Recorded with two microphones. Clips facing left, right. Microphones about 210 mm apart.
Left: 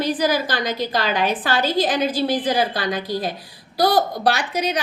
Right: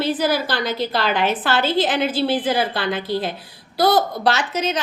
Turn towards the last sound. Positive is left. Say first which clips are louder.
# even
turn(degrees=10)  # may be behind; listen again after turning